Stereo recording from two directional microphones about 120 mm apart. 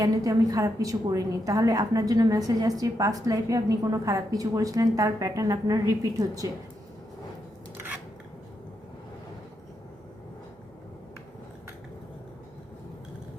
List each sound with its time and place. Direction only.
0.0 s a woman's voice: 30° right (ahead or behind)